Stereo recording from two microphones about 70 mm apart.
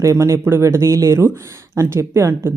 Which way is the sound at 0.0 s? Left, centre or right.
Right.